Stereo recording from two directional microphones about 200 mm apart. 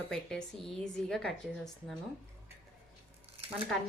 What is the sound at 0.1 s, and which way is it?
Speech, 5° left (ahead or behind).